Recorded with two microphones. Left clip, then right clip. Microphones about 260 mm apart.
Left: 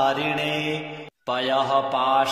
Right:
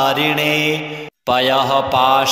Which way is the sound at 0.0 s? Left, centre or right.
Right.